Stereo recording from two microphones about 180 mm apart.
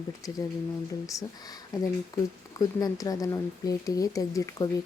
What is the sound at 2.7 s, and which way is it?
Speech, 20° left (ahead or behind).